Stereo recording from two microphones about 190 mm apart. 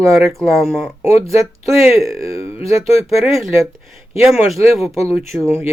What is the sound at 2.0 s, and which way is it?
Speech, 15° right (ahead or behind).